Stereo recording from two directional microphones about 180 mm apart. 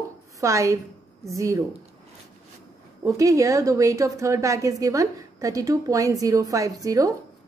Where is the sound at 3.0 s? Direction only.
20° right (ahead or behind).